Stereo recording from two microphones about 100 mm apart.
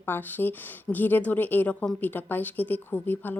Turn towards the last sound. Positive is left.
turn(degrees=20)  # may be behind; listen again after turning